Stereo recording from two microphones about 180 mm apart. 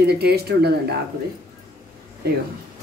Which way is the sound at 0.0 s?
60° right (ahead or behind).